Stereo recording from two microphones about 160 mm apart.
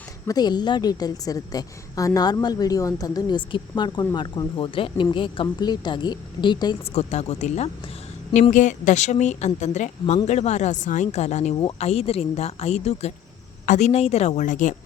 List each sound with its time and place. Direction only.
0.3 s a woman's voice: 25° left (ahead or behind)
6.9 s a woman's voice: 45° left (ahead or behind)